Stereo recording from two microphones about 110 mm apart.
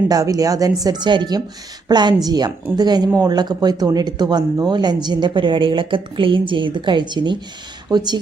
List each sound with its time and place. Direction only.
0.1 s a woman's voice: 30° right (ahead or behind)